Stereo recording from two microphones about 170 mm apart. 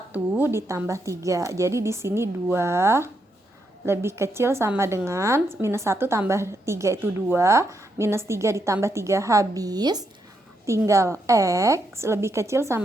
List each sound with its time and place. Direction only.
0.1 s a woman's voice: 10° right (ahead or behind)